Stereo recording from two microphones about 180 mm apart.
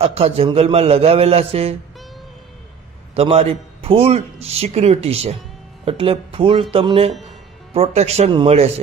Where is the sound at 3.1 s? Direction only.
35° right (ahead or behind).